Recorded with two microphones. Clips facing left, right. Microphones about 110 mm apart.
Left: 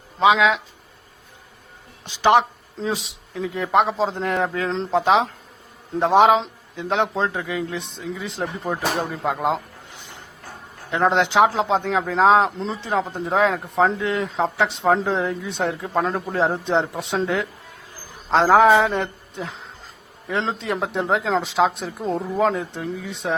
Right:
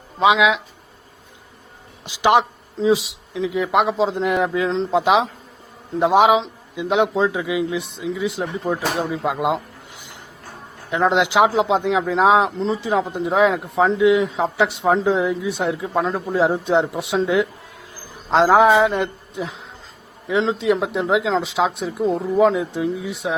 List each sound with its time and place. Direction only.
0.3 s speech: 5° right (ahead or behind)
2.0 s speech: 15° right (ahead or behind)
2.7 s speech: centre (ahead or behind)
11.2 s a woman's voice: 5° right (ahead or behind)
20.2 s speech: centre (ahead or behind)